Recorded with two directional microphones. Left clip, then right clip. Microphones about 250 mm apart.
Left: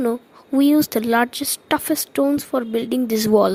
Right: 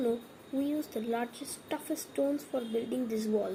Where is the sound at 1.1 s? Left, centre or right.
Left.